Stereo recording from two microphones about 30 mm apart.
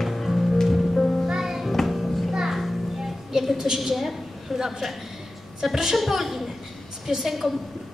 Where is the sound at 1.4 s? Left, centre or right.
Centre.